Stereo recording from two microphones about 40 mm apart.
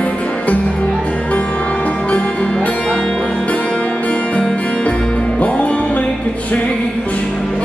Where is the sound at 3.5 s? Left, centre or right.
Left.